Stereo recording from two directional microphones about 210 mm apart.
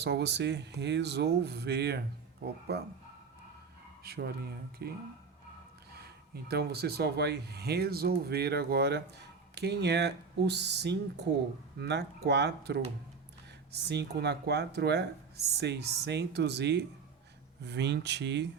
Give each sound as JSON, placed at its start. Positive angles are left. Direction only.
{"t": 0.0, "sound": "speech", "side_deg": -55}
{"t": 4.0, "sound": "speech", "side_deg": -50}
{"t": 5.9, "sound": "speech", "side_deg": -50}